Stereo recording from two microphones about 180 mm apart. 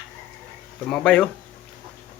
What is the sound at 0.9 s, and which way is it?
Speech, 5° left (ahead or behind).